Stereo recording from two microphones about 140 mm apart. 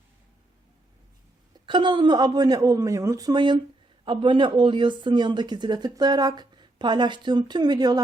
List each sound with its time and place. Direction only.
1.6 s speech: 35° right (ahead or behind)